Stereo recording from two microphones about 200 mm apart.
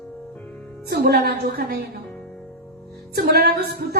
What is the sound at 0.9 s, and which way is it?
Speech, 50° right (ahead or behind).